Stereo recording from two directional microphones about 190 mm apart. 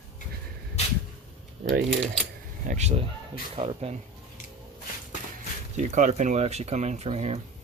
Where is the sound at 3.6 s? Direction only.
25° right (ahead or behind).